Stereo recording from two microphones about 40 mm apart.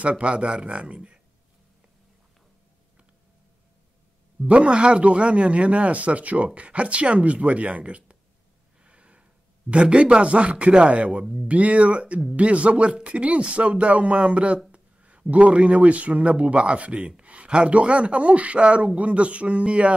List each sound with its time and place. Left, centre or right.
0.1 s speech: right
4.5 s speech: right
8.8 s gasp: right
9.7 s speech: right